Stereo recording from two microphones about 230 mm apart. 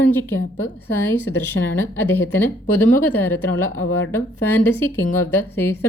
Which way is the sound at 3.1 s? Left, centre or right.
Centre.